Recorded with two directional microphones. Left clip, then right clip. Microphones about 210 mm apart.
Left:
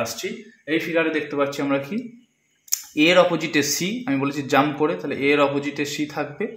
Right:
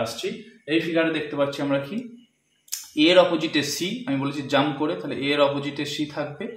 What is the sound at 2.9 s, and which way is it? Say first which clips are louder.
Speech: left 1 dB; 40° left (ahead or behind).